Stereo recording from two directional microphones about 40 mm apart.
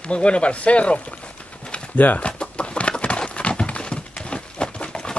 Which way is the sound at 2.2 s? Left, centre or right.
Left.